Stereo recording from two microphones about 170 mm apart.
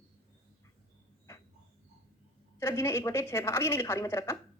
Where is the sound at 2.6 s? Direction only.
15° left (ahead or behind).